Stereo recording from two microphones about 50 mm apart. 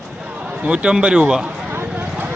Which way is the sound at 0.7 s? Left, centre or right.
Centre.